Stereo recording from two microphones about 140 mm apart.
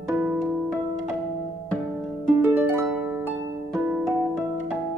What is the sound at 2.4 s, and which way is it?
Harp, 10° right (ahead or behind).